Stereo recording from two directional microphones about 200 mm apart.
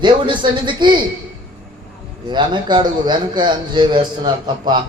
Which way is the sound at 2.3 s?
25° right (ahead or behind).